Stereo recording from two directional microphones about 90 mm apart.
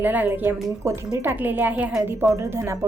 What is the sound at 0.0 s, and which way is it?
Speech, 20° right (ahead or behind).